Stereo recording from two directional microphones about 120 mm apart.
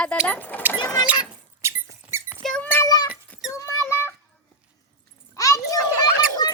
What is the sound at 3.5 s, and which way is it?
Rodents, 25° left (ahead or behind).